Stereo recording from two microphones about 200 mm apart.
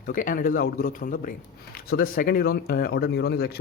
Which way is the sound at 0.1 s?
40° left (ahead or behind).